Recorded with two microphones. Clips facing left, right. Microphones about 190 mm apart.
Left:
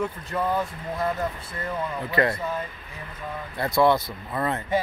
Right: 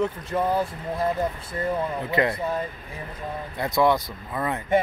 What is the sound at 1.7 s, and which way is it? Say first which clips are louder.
Speech: right 3 dB; 20° right (ahead or behind).